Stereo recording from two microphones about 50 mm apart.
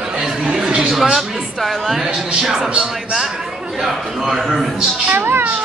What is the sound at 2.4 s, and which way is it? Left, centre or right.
Speech, centre.